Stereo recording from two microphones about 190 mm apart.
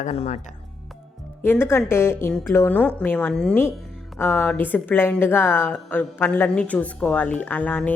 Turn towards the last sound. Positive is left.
turn(degrees=10)  # may be behind; listen again after turning